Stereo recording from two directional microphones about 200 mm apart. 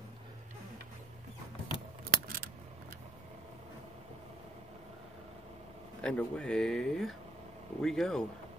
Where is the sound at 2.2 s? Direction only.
50° right (ahead or behind).